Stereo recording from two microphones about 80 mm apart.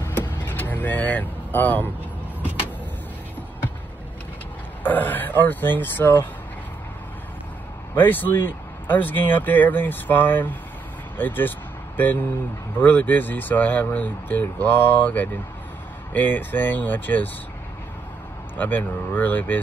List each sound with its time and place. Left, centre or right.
0.0 s vehicle: left
4.8 s speech: left
7.9 s speech: left
18.6 s speech: left